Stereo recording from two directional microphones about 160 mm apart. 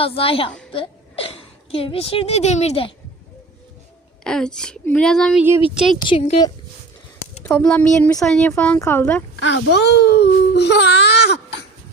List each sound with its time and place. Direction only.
0.0 s a woman's voice: 35° left (ahead or behind)
4.2 s a woman's voice: 5° left (ahead or behind)
6.0 s a woman's voice: 35° left (ahead or behind)
7.4 s a woman's voice: 10° left (ahead or behind)
9.4 s speech: 90° left